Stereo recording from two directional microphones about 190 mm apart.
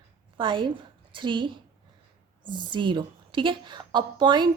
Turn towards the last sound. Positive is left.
turn(degrees=-25)  # may be behind; listen again after turning